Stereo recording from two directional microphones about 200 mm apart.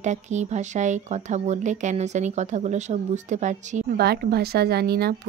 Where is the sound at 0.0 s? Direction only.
35° right (ahead or behind).